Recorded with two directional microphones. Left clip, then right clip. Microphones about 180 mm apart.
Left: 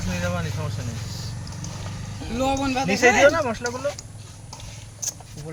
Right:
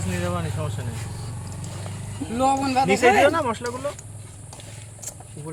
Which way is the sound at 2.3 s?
60° right (ahead or behind).